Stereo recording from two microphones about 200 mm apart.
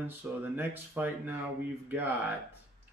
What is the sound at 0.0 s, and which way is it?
Speech, 10° right (ahead or behind).